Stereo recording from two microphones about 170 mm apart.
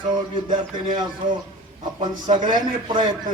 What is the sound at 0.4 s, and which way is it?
A man's voice, 30° right (ahead or behind).